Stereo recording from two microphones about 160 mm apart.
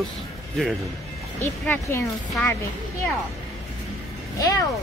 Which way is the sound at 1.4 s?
15° left (ahead or behind).